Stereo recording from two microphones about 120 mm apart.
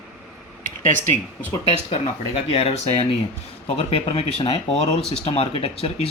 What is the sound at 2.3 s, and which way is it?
Speech, 55° left (ahead or behind).